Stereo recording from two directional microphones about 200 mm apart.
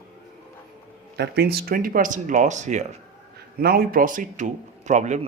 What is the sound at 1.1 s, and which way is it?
Speech, 55° right (ahead or behind).